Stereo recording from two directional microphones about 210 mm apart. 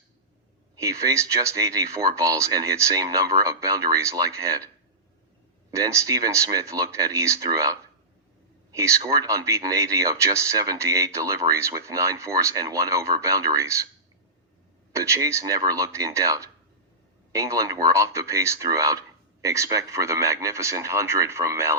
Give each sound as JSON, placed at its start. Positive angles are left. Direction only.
{"t": 0.8, "sound": "speech", "side_deg": -15}
{"t": 5.7, "sound": "speech", "side_deg": -15}
{"t": 14.9, "sound": "speech", "side_deg": -15}